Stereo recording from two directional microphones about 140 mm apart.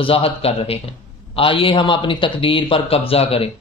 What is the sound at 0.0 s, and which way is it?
A man's voice, 40° left (ahead or behind).